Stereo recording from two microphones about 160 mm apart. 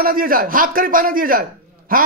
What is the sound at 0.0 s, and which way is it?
A man's voice, 65° right (ahead or behind).